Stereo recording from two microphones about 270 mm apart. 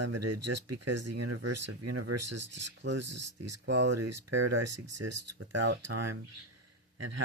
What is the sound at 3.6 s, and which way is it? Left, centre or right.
Speech, right.